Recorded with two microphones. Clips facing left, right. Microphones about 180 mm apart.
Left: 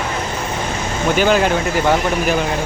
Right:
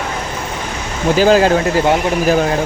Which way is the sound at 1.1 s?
35° right (ahead or behind).